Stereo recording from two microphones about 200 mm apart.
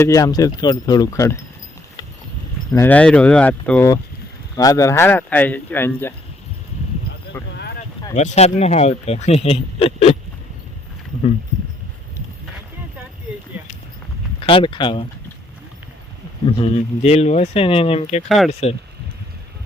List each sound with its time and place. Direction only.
0.0 s speech: 15° left (ahead or behind)
2.7 s speech: 10° left (ahead or behind)
7.3 s speech: 10° left (ahead or behind)
7.8 s speech: 35° left (ahead or behind)
14.4 s speech: 25° left (ahead or behind)
16.5 s speech: 30° left (ahead or behind)
18.3 s speech: centre (ahead or behind)